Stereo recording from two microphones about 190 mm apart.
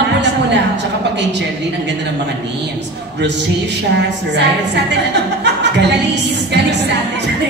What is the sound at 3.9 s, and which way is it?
A woman's voice, 65° right (ahead or behind).